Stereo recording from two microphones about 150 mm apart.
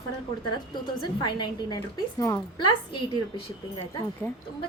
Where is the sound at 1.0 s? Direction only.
30° left (ahead or behind).